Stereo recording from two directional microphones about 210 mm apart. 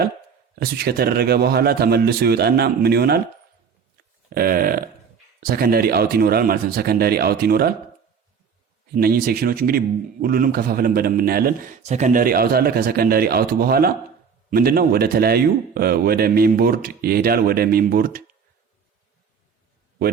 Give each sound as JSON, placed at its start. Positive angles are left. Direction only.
{"t": 0.6, "sound": "a man's voice", "side_deg": -50}
{"t": 4.4, "sound": "a man's voice", "side_deg": -45}
{"t": 8.9, "sound": "a man's voice", "side_deg": -45}
{"t": 11.9, "sound": "a man's voice", "side_deg": -35}